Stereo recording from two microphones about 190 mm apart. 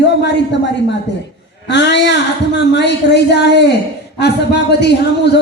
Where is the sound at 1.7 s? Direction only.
65° left (ahead or behind).